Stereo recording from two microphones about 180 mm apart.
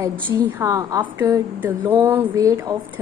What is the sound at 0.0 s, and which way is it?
A woman's voice, 15° right (ahead or behind).